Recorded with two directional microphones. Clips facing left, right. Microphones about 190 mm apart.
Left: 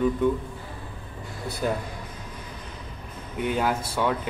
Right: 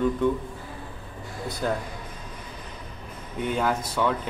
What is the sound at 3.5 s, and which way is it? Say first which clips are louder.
Speech: even; 10° left (ahead or behind).